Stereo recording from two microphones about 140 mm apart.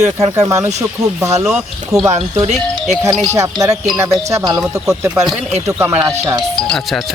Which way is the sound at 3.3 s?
20° right (ahead or behind).